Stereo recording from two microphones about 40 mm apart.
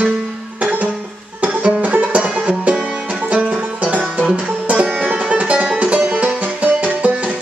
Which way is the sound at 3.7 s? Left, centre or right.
Right.